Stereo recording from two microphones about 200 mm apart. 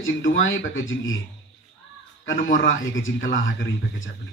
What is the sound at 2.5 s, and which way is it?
Speech, 70° left (ahead or behind).